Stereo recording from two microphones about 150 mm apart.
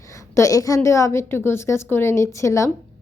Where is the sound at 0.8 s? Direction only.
20° left (ahead or behind).